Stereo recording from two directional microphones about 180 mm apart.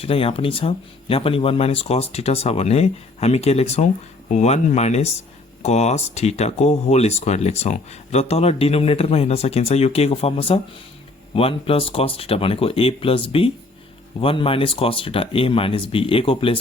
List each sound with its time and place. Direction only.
0.0 s speech: 30° left (ahead or behind)